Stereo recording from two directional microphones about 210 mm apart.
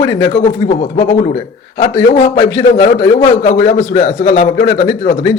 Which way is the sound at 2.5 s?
15° left (ahead or behind).